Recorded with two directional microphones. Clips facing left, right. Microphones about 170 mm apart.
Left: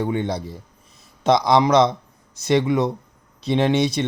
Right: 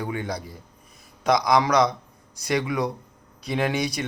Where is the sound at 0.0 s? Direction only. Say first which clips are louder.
Left 6 dB; 25° left (ahead or behind).